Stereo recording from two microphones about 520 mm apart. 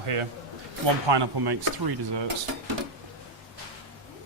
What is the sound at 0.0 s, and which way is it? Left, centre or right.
Speech, right.